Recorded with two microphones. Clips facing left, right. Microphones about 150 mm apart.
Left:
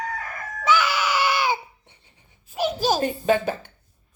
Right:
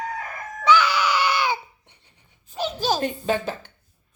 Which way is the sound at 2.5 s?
10° left (ahead or behind).